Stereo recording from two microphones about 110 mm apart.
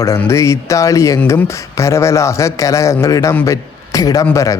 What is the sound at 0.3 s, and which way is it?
A man's voice, 25° left (ahead or behind).